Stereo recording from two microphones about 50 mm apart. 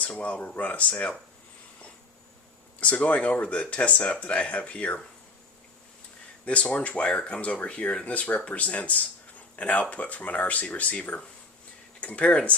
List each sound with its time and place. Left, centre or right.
0.2 s speech: left
2.8 s speech: left
6.4 s speech: left